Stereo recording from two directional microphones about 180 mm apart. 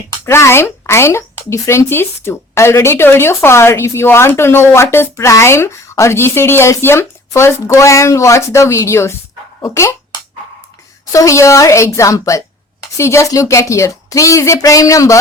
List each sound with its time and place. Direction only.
0.3 s speech: 15° left (ahead or behind)
11.1 s speech: 15° left (ahead or behind)